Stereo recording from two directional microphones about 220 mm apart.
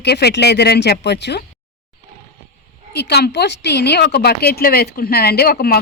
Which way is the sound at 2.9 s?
50° left (ahead or behind).